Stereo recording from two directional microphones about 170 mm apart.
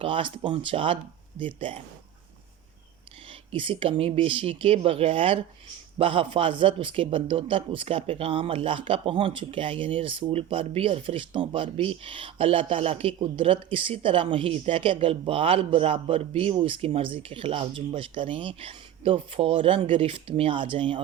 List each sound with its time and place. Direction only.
0.0 s speech: 30° right (ahead or behind)
3.5 s speech: 30° right (ahead or behind)